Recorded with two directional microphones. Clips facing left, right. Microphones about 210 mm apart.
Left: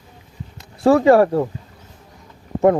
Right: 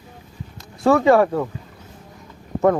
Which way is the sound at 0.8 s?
30° left (ahead or behind).